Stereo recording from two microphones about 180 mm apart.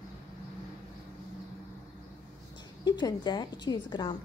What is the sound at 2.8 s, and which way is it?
A woman's voice, 25° left (ahead or behind).